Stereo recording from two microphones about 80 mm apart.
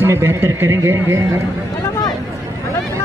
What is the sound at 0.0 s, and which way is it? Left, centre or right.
Speech, right.